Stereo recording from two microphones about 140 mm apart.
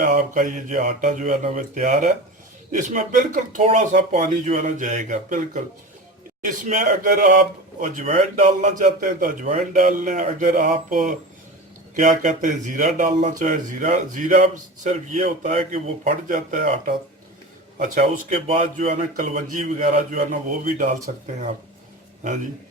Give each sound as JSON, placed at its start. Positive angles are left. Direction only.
{"t": 0.0, "sound": "speech", "side_deg": -65}
{"t": 9.7, "sound": "speech", "side_deg": -75}
{"t": 16.0, "sound": "a man's voice", "side_deg": -65}